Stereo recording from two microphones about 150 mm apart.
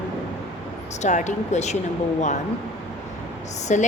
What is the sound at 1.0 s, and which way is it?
Speech, 55° left (ahead or behind).